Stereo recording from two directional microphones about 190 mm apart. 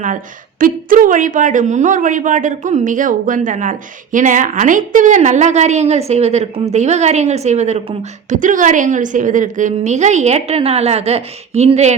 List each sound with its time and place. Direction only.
0.6 s speech: 45° right (ahead or behind)